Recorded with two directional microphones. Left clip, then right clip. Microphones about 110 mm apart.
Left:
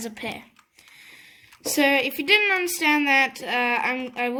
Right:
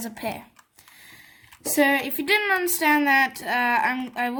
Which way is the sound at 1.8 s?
45° right (ahead or behind).